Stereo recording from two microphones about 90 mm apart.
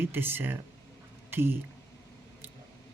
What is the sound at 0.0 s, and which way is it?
Speech, 25° right (ahead or behind).